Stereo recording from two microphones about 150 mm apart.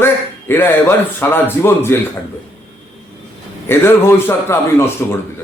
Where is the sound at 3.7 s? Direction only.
15° left (ahead or behind).